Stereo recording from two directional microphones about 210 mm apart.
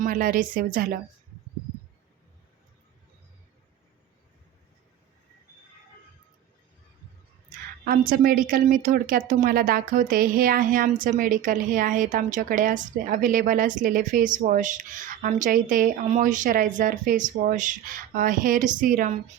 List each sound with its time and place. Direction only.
0.0 s a woman's voice: 40° right (ahead or behind)
7.9 s a woman's voice: 45° right (ahead or behind)